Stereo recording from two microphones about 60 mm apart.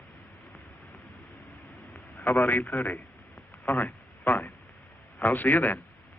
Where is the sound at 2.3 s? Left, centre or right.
Left.